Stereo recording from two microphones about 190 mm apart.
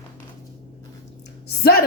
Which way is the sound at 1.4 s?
55° left (ahead or behind).